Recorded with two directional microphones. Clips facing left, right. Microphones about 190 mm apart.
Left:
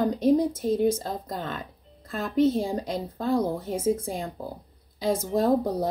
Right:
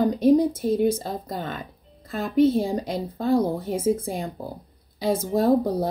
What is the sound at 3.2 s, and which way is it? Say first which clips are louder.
Speech: right 4 dB; 30° right (ahead or behind).